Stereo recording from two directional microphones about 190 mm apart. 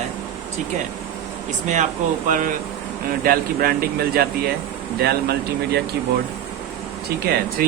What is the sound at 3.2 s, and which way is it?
Speech, 50° right (ahead or behind).